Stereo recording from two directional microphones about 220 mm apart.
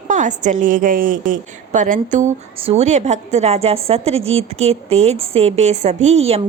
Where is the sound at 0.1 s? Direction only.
35° right (ahead or behind).